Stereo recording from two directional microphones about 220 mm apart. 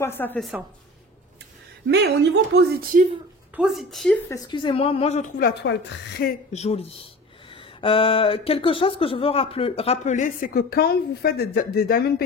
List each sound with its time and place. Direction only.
0.0 s a woman's voice: 10° left (ahead or behind)
1.9 s speech: 50° right (ahead or behind)
3.5 s speech: centre (ahead or behind)
4.3 s speech: 20° left (ahead or behind); by 5.5 s 35° left (ahead or behind)
5.6 s a woman's voice: 50° left (ahead or behind)
6.5 s speech: 30° left (ahead or behind); by 12.0 s 45° left (ahead or behind)